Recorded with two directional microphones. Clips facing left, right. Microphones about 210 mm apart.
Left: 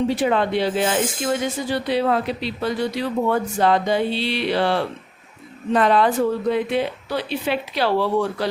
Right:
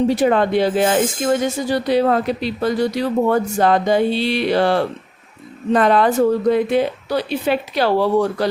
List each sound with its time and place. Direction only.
0.1 s speech: 45° right (ahead or behind)